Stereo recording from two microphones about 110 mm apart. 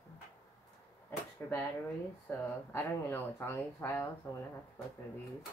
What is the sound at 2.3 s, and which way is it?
Speech, 20° left (ahead or behind).